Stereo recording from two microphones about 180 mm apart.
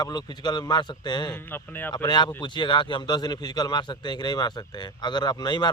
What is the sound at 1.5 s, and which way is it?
Speech, 10° left (ahead or behind).